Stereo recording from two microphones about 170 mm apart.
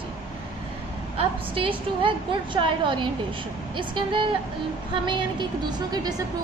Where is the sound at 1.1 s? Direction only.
30° right (ahead or behind).